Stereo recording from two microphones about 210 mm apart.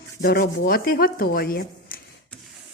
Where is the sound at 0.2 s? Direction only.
45° left (ahead or behind).